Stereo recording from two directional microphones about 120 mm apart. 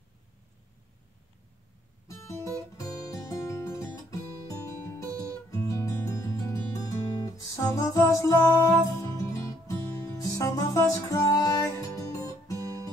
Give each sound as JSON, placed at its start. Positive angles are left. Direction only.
{"t": 2.0, "sound": "music", "side_deg": 25}
{"t": 10.2, "sound": "music", "side_deg": 30}